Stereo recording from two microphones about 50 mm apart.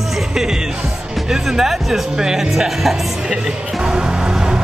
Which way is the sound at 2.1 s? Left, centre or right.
Centre.